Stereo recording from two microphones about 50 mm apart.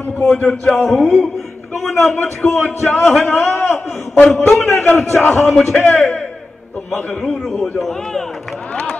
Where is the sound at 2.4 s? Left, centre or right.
Left.